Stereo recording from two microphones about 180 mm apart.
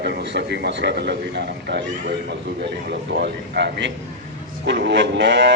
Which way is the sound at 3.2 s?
70° right (ahead or behind).